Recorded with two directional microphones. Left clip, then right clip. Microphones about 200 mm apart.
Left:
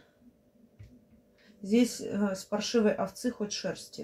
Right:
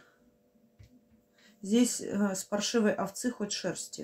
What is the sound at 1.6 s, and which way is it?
Speech, 45° right (ahead or behind).